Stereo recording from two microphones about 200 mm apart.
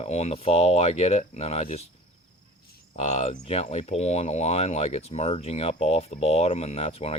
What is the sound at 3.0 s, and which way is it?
Speech, 35° left (ahead or behind).